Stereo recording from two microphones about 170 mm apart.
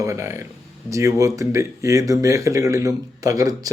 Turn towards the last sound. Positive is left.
turn(degrees=-20)  # may be behind; listen again after turning